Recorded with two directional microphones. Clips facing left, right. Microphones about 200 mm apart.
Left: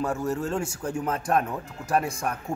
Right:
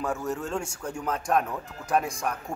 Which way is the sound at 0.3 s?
Centre (ahead or behind).